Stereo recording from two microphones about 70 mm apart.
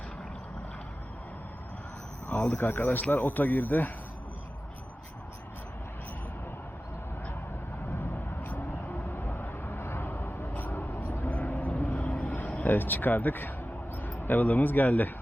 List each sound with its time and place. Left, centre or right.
2.2 s speech: left
7.9 s vehicle: left
12.6 s a man's voice: left